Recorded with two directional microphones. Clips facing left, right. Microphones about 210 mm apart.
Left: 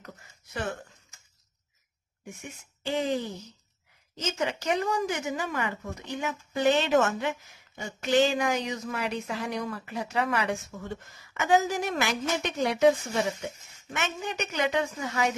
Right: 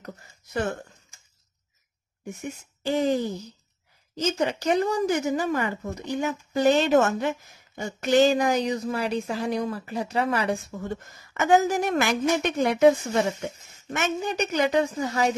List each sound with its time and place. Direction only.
0.0 s speech: 45° right (ahead or behind)
2.4 s a woman's voice: 40° right (ahead or behind)
13.9 s a woman's voice: 40° right (ahead or behind)